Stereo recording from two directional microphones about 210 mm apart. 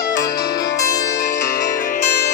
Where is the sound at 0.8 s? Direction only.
15° left (ahead or behind).